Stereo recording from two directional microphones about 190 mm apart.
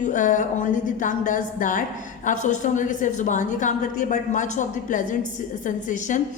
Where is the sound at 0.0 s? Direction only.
40° left (ahead or behind).